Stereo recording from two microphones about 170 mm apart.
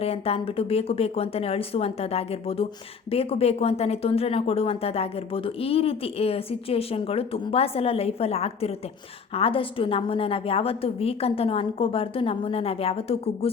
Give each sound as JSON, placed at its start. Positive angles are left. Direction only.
{"t": 0.0, "sound": "speech", "side_deg": 35}